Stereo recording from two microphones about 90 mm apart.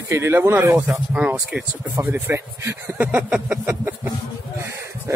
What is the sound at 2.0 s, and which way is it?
Speech, 25° right (ahead or behind).